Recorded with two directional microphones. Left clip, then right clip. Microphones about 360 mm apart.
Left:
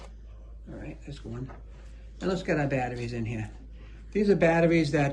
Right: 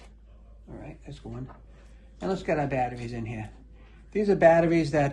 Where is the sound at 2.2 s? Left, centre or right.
Centre.